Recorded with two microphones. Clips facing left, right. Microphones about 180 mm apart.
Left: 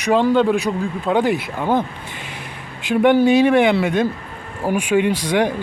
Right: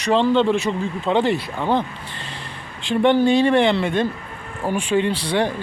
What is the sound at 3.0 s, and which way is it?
Speech, 10° left (ahead or behind).